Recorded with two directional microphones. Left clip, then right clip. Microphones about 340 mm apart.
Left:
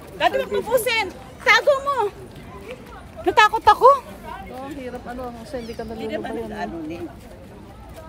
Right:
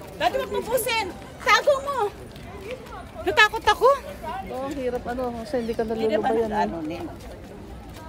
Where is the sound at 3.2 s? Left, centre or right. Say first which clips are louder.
Left 4 dB; centre.